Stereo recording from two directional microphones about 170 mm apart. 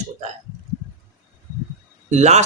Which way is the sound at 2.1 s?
40° right (ahead or behind).